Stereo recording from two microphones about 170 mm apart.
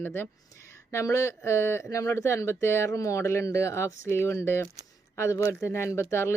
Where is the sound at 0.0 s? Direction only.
15° left (ahead or behind).